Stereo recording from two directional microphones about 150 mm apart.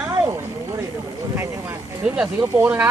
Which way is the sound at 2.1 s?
5° right (ahead or behind).